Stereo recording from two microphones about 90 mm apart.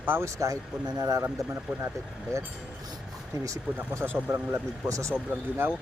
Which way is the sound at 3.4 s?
35° right (ahead or behind).